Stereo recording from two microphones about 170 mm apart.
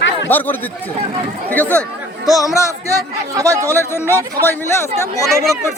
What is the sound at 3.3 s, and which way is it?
Speech, 20° right (ahead or behind).